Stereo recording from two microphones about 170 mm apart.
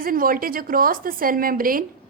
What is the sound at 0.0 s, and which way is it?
A woman's voice, 55° right (ahead or behind).